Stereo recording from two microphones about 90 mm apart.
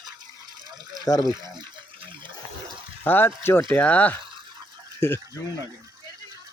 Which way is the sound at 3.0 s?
20° left (ahead or behind).